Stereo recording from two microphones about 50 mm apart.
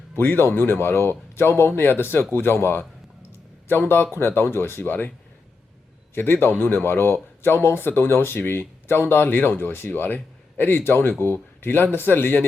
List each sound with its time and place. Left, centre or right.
0.2 s speech: left
6.1 s speech: left